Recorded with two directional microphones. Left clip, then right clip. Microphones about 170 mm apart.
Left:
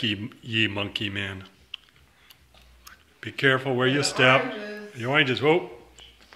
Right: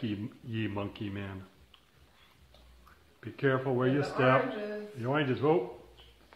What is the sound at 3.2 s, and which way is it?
Speech, 20° left (ahead or behind).